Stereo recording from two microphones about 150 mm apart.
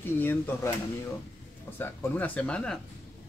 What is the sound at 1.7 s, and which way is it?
Speech, 15° left (ahead or behind).